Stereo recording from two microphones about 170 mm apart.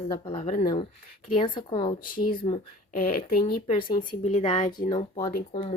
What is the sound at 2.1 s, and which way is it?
Speech, 55° left (ahead or behind).